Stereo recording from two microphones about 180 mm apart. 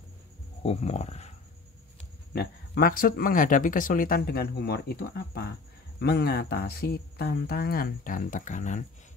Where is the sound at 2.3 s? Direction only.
55° left (ahead or behind).